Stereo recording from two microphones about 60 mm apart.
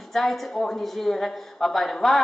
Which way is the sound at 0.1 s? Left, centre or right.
Centre.